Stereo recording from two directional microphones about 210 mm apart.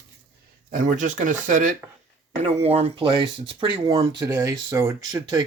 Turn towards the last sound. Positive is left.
turn(degrees=-20)  # may be behind; listen again after turning